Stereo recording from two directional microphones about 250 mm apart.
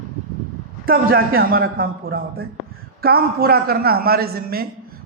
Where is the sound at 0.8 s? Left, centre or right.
Right.